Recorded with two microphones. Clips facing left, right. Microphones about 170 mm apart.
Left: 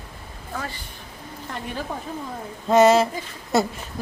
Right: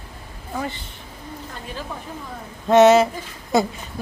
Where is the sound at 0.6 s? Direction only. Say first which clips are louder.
Right 6 dB; 20° right (ahead or behind).